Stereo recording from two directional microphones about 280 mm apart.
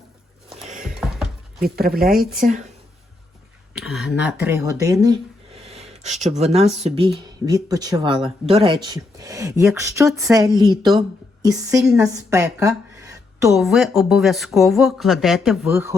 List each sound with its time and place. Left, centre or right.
0.9 s a sound: centre
1.6 s speech: right
3.8 s a woman's voice: centre
13.5 s speech: centre